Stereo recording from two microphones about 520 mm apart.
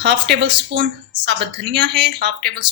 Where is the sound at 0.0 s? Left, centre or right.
Centre.